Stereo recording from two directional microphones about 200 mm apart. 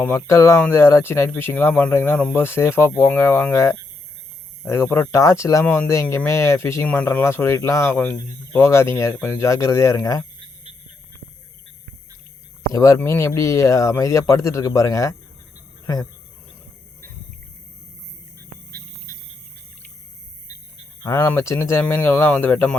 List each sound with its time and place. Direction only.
0.0 s speech: 15° left (ahead or behind)
12.7 s speech: 15° left (ahead or behind)
21.0 s speech: 15° left (ahead or behind)